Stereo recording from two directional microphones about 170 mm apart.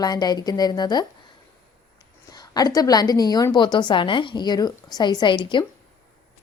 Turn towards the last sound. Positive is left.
turn(degrees=30)  # may be behind; listen again after turning